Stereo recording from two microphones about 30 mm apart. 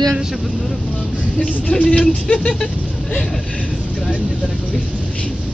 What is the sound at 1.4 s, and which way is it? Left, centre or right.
Speech, left.